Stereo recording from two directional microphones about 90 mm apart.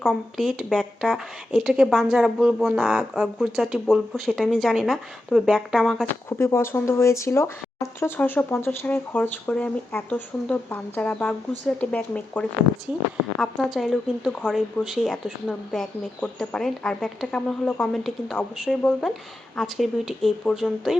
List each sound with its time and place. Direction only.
0.0 s speech: 5° left (ahead or behind)
6.2 s speech: 30° left (ahead or behind)
13.4 s speech: centre (ahead or behind)
19.5 s speech: centre (ahead or behind)